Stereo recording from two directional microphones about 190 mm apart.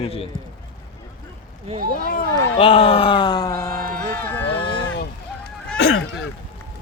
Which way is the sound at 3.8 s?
50° right (ahead or behind).